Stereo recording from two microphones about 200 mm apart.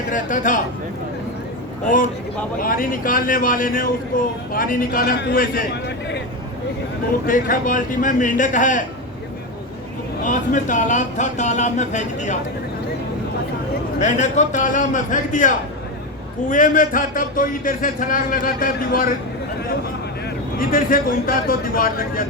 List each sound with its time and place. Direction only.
0.1 s speech: 40° left (ahead or behind)
2.6 s speech: 45° left (ahead or behind)
7.3 s speech: 45° left (ahead or behind)
10.2 s speech: 40° left (ahead or behind)
14.0 s speech: 35° left (ahead or behind)
20.6 s speech: 45° left (ahead or behind)